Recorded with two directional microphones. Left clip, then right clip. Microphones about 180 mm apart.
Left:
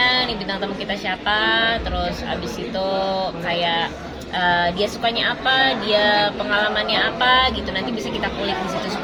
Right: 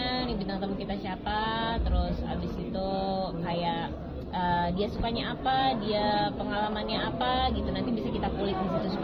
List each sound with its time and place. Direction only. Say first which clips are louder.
0.0 s a sound: left 14 dB; 20° left (ahead or behind)
1.0 s music: left 12 dB; 15° left (ahead or behind)
3.6 s music: left 11 dB; 15° left (ahead or behind)
4.4 s speech: left 10 dB; 20° left (ahead or behind)